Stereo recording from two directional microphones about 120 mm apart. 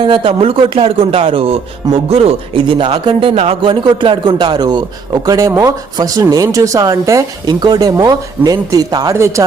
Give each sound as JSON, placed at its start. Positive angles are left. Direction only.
{"t": 0.0, "sound": "a man's voice", "side_deg": -45}